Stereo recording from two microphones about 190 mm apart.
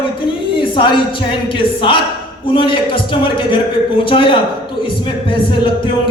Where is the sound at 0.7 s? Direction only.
25° left (ahead or behind).